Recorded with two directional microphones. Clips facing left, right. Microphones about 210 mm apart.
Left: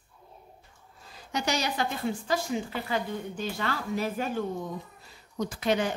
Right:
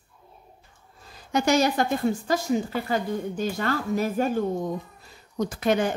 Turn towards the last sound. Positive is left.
turn(degrees=-50)  # may be behind; listen again after turning